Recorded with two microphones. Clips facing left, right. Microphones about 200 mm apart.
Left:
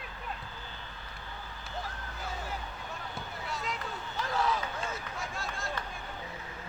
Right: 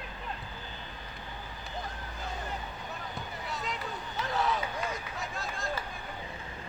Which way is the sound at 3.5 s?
Centre (ahead or behind).